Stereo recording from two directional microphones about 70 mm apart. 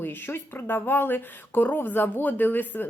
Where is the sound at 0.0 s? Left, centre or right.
Left.